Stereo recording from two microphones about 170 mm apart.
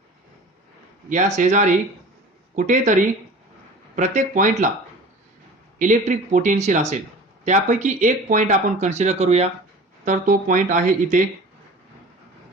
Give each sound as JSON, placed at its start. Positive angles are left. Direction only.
{"t": 1.1, "sound": "speech", "side_deg": -45}
{"t": 5.8, "sound": "speech", "side_deg": -45}
{"t": 10.1, "sound": "speech", "side_deg": -50}